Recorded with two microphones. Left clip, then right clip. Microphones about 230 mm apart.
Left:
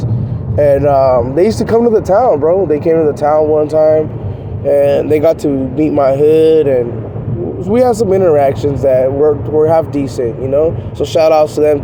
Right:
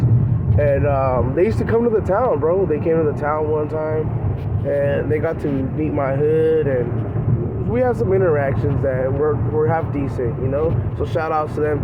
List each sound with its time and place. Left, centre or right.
0.6 s speech: left
4.7 s speech: left
5.8 s speech: left